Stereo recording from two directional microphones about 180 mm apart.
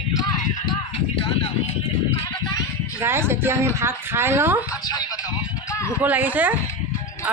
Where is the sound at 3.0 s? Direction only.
15° right (ahead or behind).